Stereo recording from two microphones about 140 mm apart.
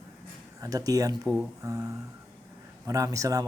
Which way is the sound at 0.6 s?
25° right (ahead or behind).